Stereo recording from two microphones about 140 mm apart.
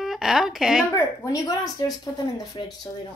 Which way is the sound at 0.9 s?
25° left (ahead or behind).